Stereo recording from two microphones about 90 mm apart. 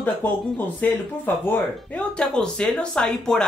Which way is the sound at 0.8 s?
15° left (ahead or behind).